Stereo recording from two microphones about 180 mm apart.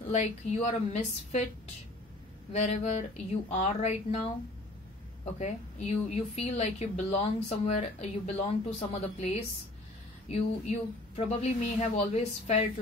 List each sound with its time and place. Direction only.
0.0 s speech: 40° left (ahead or behind)
2.5 s speech: 40° left (ahead or behind)
5.4 s speech: 40° left (ahead or behind)